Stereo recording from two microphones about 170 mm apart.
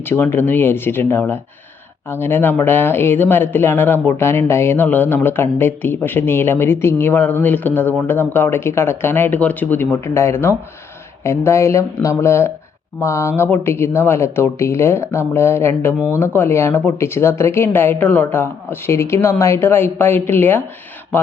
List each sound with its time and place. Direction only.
0.0 s speech: 15° left (ahead or behind)